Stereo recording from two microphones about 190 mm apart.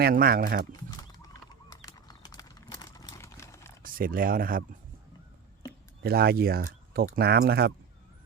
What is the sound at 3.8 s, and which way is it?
Speech, 50° right (ahead or behind).